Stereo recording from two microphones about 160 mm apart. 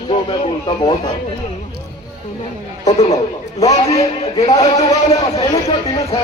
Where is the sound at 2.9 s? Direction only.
40° left (ahead or behind).